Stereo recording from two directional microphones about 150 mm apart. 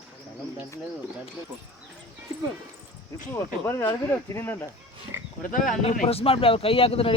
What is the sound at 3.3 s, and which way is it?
Speech, 15° left (ahead or behind).